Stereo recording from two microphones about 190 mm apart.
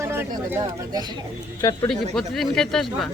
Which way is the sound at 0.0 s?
10° right (ahead or behind).